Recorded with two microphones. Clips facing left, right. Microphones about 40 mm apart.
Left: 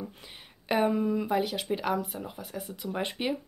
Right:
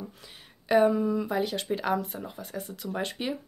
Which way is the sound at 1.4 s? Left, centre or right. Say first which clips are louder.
Right 1 dB; centre.